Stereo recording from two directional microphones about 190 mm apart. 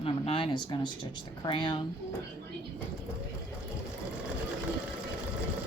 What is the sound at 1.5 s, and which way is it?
Speech, 25° left (ahead or behind).